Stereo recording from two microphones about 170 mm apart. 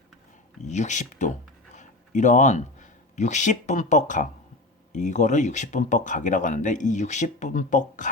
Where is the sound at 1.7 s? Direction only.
45° left (ahead or behind).